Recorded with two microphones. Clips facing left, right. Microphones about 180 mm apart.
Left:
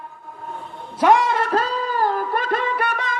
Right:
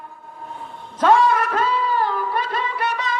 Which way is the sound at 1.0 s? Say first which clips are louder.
Right 1 dB; 20° left (ahead or behind).